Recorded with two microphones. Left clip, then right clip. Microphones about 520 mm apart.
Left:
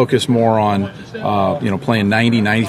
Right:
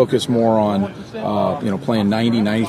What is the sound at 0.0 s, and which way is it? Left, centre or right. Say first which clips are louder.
A man's voice: left 2 dB; left.